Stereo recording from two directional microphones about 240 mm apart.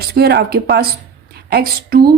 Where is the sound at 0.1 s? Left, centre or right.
Right.